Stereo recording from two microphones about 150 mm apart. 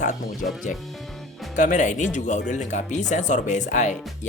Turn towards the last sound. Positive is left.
turn(degrees=55)  # may be behind; listen again after turning